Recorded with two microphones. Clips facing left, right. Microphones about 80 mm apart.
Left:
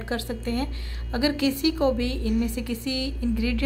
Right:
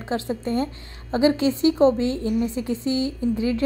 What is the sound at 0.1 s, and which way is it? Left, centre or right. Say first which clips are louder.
A woman's voice: right 4 dB; right.